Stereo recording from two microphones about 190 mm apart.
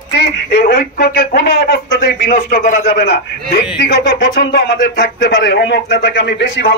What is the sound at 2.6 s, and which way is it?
Speech, 40° left (ahead or behind).